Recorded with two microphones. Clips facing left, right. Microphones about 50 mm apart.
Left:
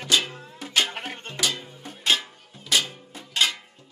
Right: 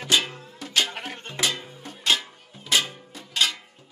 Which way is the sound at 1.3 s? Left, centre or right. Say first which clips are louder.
Right 1 dB; centre.